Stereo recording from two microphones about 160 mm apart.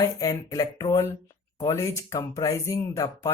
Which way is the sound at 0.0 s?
20° left (ahead or behind).